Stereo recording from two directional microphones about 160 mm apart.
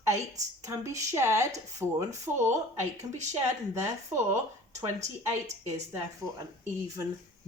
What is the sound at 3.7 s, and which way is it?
Speech, 20° right (ahead or behind).